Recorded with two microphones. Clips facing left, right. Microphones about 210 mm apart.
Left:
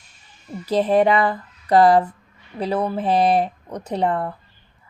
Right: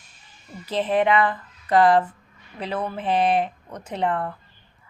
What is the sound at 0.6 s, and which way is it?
Speech, 40° left (ahead or behind).